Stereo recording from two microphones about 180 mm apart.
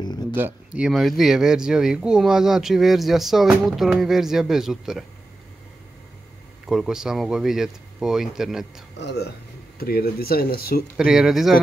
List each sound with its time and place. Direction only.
0.0 s a sound: 25° left (ahead or behind)
0.4 s speech: 10° right (ahead or behind)
6.6 s speech: 5° right (ahead or behind)
8.9 s speech: 70° left (ahead or behind)
9.8 s speech: 60° left (ahead or behind)
11.0 s speech: 5° right (ahead or behind)